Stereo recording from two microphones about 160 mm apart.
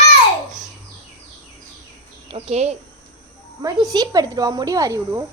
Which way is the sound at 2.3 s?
45° right (ahead or behind).